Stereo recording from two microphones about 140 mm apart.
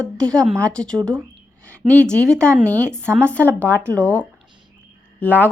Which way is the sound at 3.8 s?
10° left (ahead or behind).